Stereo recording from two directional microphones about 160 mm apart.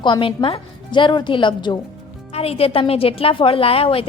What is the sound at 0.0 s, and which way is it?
A woman's voice, 30° left (ahead or behind).